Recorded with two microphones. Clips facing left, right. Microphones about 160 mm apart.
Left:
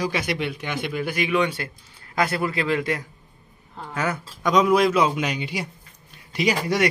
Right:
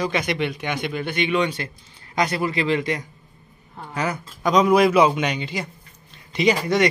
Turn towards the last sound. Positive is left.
turn(degrees=5)  # may be behind; listen again after turning